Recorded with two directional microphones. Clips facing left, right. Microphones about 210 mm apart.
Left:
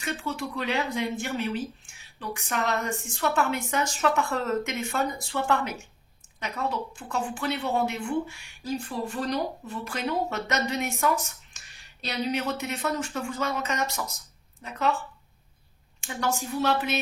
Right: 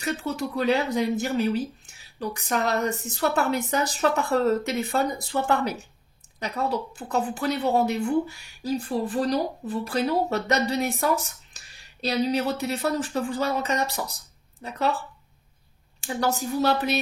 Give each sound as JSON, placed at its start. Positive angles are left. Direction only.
{"t": 0.0, "sound": "speech", "side_deg": -40}